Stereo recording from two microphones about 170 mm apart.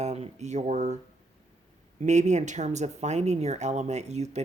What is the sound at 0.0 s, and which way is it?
Speech, 40° right (ahead or behind).